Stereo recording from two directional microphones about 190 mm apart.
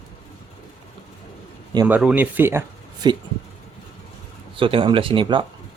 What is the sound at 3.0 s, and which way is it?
Speech, 20° right (ahead or behind).